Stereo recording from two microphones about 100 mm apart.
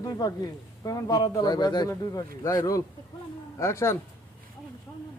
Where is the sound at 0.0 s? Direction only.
35° left (ahead or behind).